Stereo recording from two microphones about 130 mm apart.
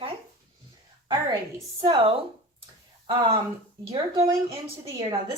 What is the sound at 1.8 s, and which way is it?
Speech, 40° right (ahead or behind).